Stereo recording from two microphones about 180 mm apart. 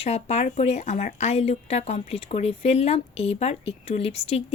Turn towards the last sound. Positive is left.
turn(degrees=35)  # may be behind; listen again after turning